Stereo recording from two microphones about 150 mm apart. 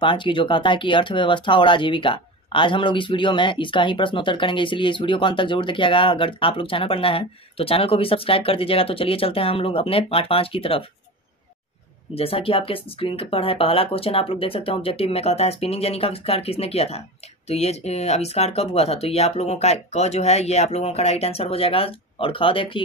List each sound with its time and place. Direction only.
0.0 s speech: 35° left (ahead or behind)
12.1 s speech: 40° left (ahead or behind)